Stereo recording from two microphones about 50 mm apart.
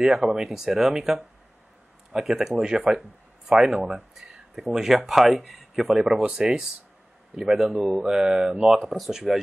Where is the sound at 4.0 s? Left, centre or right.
Centre.